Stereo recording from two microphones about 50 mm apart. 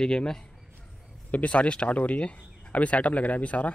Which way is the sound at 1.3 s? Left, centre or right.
Left.